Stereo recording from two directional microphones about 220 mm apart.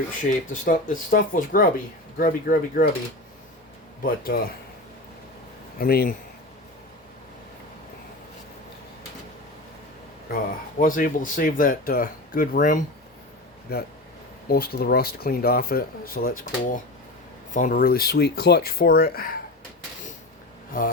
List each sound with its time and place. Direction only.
0.5 s speech: 35° left (ahead or behind)
4.0 s speech: 40° left (ahead or behind)
5.8 s speech: 45° left (ahead or behind)
10.3 s speech: 40° left (ahead or behind)
20.7 s speech: 40° left (ahead or behind)